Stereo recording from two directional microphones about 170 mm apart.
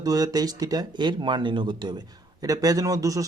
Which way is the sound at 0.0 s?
20° right (ahead or behind).